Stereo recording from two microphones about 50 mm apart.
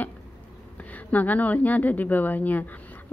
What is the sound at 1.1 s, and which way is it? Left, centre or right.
A woman's voice, left.